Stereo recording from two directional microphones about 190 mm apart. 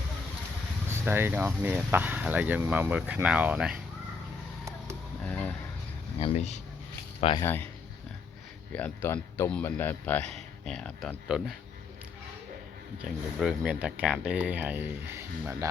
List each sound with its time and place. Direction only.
0.9 s speech: 10° right (ahead or behind)
5.2 s a sound: 10° left (ahead or behind)
6.1 s speech: 35° left (ahead or behind)
7.4 s speech: 10° left (ahead or behind)
8.7 s speech: 10° left (ahead or behind)
13.4 s speech: 5° right (ahead or behind)